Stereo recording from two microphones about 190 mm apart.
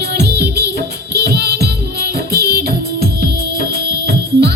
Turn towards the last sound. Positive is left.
turn(degrees=-60)  # may be behind; listen again after turning